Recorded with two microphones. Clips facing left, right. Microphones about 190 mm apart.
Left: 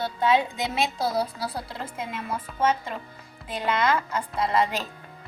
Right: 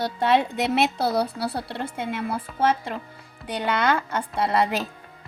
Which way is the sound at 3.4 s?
65° right (ahead or behind).